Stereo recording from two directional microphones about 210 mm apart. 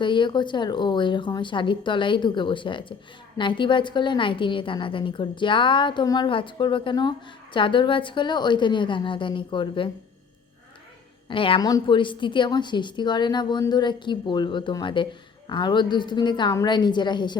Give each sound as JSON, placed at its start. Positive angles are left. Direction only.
{"t": 0.0, "sound": "a woman's voice", "side_deg": 20}
{"t": 11.3, "sound": "a woman's voice", "side_deg": 25}